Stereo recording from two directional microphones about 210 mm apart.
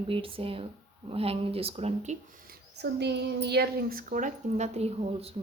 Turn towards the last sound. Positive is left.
turn(degrees=-30)  # may be behind; listen again after turning